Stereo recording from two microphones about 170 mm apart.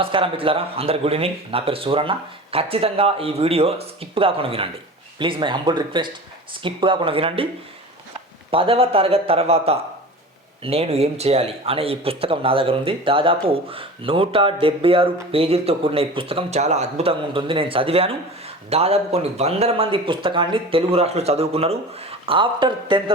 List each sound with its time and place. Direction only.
0.0 s speech: 30° right (ahead or behind)
8.4 s speech: 30° right (ahead or behind)